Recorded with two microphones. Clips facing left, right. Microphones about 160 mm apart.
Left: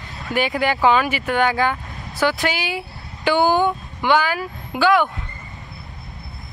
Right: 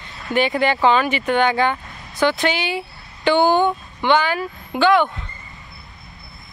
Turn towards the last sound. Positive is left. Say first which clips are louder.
# right 1 dB
turn(degrees=5)  # may be behind; listen again after turning